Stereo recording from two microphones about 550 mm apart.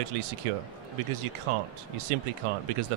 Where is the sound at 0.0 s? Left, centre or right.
Right.